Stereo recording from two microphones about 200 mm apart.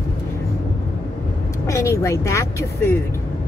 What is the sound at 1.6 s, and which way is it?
Speech, 15° left (ahead or behind).